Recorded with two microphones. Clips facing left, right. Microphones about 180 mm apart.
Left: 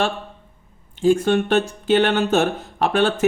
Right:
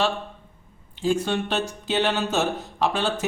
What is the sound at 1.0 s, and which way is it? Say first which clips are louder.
Speech: left 7 dB; 55° left (ahead or behind).